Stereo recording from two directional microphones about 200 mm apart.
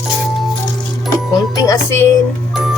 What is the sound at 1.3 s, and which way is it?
Music, 15° left (ahead or behind).